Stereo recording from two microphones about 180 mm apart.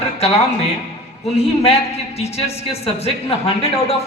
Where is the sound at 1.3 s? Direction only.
35° left (ahead or behind).